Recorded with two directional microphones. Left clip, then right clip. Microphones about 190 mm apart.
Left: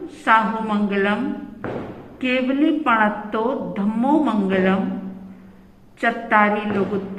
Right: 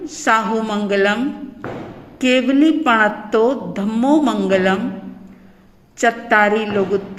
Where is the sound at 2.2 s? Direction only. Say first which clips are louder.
Right 5 dB; 50° right (ahead or behind).